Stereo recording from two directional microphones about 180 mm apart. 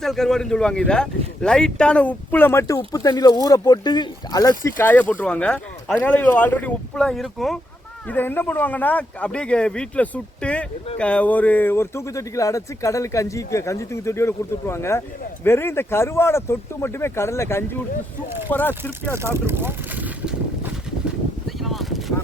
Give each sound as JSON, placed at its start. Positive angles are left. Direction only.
{"t": 0.0, "sound": "speech", "side_deg": 0}
{"t": 19.1, "sound": "boat", "side_deg": -15}
{"t": 21.4, "sound": "vehicle", "side_deg": 0}